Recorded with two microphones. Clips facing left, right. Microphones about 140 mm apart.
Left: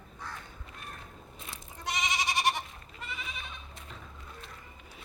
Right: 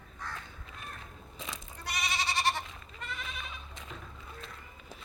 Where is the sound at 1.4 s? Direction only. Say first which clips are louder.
Right 5 dB; 90° right.